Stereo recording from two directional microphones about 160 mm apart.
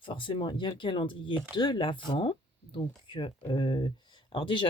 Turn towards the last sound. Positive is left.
turn(degrees=30)  # may be behind; listen again after turning